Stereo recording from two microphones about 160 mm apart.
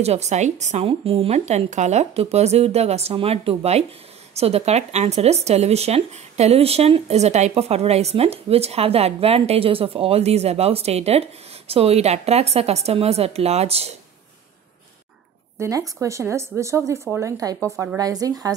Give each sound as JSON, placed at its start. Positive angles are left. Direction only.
{"t": 0.0, "sound": "speech", "side_deg": -45}
{"t": 15.6, "sound": "speech", "side_deg": -20}